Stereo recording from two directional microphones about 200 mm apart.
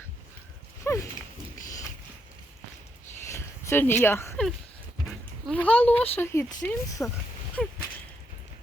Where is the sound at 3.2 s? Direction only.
15° left (ahead or behind).